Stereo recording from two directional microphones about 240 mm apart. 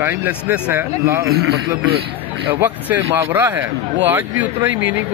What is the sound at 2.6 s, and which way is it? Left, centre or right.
Speech, centre.